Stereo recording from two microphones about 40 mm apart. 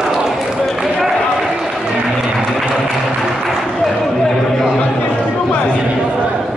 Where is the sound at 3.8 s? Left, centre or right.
Centre.